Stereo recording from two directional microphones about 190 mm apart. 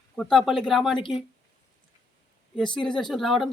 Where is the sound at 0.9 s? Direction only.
25° left (ahead or behind).